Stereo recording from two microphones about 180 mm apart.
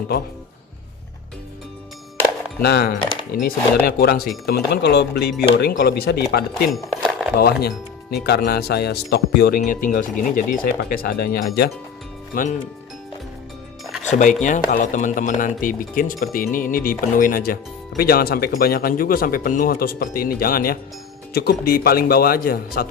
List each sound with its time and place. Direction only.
2.6 s speech: 65° left (ahead or behind)
6.7 s dishes: centre (ahead or behind)
7.3 s speech: 60° left (ahead or behind)
14.1 s speech: 45° left (ahead or behind)